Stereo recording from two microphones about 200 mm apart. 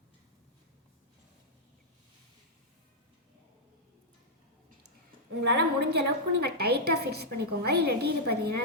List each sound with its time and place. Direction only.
5.5 s a woman's voice: 55° right (ahead or behind)